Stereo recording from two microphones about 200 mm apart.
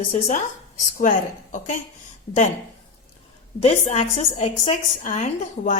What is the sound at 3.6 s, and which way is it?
A woman's voice, 35° left (ahead or behind).